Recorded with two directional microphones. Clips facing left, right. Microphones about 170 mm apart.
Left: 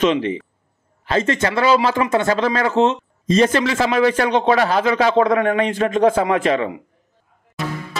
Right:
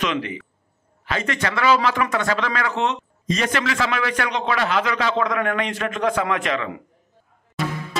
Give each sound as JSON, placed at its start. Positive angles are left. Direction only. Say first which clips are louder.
{"t": 0.0, "sound": "a man's voice", "louder": "left 7 dB", "side_deg": 30}